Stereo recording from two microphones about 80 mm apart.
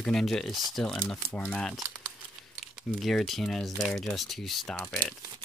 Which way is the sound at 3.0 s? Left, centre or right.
Centre.